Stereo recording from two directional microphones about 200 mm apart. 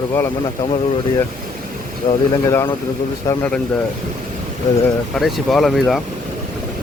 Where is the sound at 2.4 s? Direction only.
10° left (ahead or behind).